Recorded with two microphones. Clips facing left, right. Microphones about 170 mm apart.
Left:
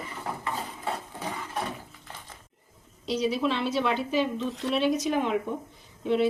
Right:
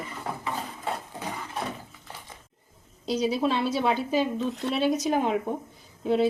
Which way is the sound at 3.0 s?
35° right (ahead or behind).